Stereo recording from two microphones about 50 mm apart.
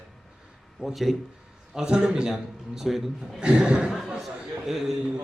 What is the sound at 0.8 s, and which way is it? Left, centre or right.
Speech, centre.